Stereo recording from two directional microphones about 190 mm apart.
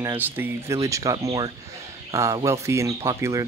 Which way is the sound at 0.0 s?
10° right (ahead or behind).